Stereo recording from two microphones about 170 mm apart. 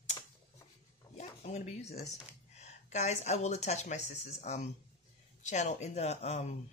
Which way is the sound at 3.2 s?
40° left (ahead or behind).